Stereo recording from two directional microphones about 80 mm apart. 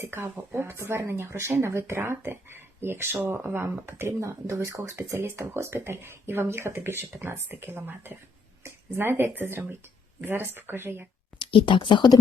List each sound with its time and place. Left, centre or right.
0.0 s speech: right
0.5 s speech: right
11.3 s speech: left